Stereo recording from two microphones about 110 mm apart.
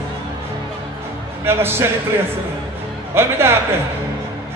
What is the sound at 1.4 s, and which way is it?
Speech, 20° right (ahead or behind).